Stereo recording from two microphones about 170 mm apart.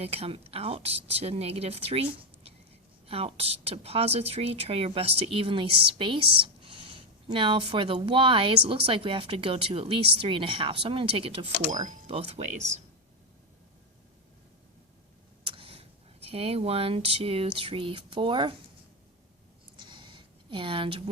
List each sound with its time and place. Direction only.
0.0 s speech: 35° right (ahead or behind)
11.7 s speech: 45° right (ahead or behind)
12.1 s speech: 35° right (ahead or behind)
15.4 s speech: 30° right (ahead or behind)
19.7 s a sound: 30° right (ahead or behind)